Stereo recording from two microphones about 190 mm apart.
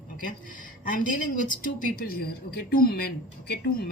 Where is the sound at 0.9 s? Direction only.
45° left (ahead or behind).